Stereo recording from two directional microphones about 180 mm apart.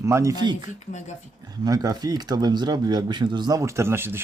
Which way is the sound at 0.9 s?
40° left (ahead or behind).